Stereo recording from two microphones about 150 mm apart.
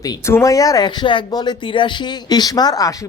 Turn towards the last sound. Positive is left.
turn(degrees=25)  # may be behind; listen again after turning